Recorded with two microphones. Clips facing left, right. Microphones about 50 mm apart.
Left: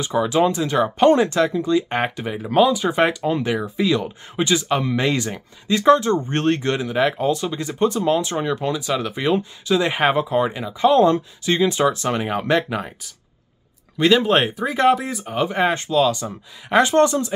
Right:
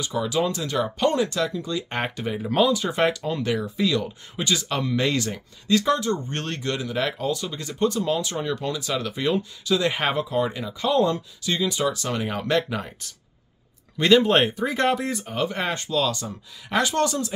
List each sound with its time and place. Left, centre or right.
0.0 s speech: left
2.0 s speech: centre
5.9 s speech: left
10.9 s speech: left
12.3 s speech: centre
13.9 s speech: centre; by 17.2 s left